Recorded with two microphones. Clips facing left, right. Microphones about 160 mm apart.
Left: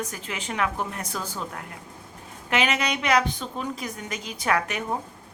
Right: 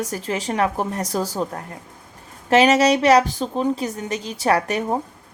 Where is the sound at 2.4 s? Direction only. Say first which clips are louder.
Right 10 dB; 35° right (ahead or behind).